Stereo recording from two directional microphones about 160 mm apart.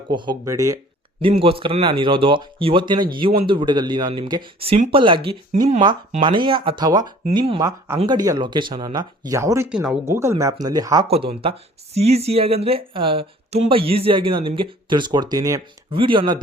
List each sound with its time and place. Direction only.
0.1 s speech: 30° right (ahead or behind)
1.2 s speech: 35° right (ahead or behind)
7.3 s speech: 35° right (ahead or behind); by 9.6 s 20° right (ahead or behind)
9.6 s speech: 5° right (ahead or behind)
10.1 s speech: 15° right (ahead or behind)
11.9 s speech: 40° right (ahead or behind); by 15.6 s 20° right (ahead or behind)
15.9 s speech: 35° right (ahead or behind)